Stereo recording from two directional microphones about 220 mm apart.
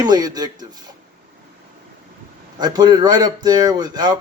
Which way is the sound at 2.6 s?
20° right (ahead or behind).